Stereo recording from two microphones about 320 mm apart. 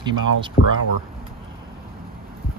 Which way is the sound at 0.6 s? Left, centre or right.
Left.